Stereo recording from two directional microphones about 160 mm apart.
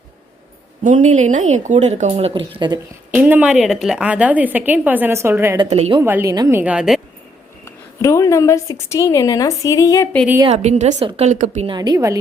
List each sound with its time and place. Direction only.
0.9 s speech: 50° right (ahead or behind); by 2.8 s 30° right (ahead or behind)
3.2 s a woman's voice: 10° right (ahead or behind)
5.6 s speech: 45° right (ahead or behind)
6.0 s a woman's voice: 15° right (ahead or behind)
6.6 s speech: 5° right (ahead or behind)
7.6 s a woman's voice: 20° left (ahead or behind)
10.5 s speech: 45° right (ahead or behind)
11.6 s a woman's voice: 25° right (ahead or behind)